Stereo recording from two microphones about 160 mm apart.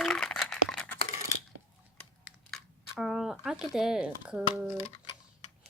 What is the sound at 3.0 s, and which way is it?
Speech, centre (ahead or behind).